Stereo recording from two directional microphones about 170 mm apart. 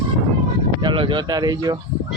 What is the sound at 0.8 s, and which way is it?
Speech, 30° right (ahead or behind).